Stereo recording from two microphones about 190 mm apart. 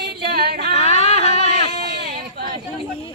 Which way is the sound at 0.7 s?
35° left (ahead or behind).